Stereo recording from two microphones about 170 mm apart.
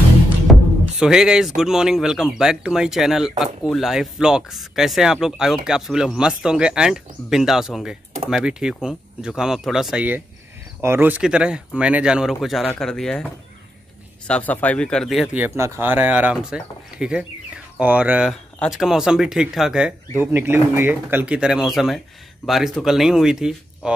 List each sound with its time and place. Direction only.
0.5 s speech: 5° right (ahead or behind)
15.3 s speech: 15° right (ahead or behind)